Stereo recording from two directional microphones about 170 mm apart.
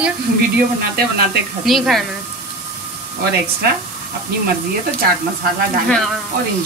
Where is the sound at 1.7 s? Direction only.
Centre (ahead or behind).